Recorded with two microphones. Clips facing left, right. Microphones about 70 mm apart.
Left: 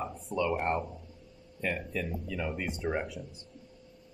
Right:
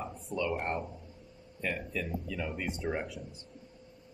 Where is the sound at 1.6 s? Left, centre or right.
Left.